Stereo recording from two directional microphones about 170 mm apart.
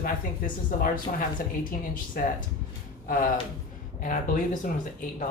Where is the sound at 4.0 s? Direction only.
50° left (ahead or behind).